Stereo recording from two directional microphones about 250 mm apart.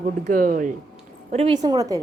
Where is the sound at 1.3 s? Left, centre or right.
Right.